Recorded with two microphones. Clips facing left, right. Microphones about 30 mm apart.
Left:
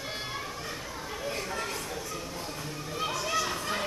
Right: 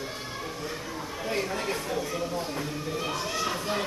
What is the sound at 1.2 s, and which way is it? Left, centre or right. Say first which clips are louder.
Speech: right 4 dB; centre.